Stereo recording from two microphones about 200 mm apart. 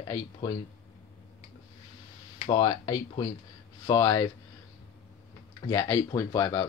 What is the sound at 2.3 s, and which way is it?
Speech, 25° left (ahead or behind).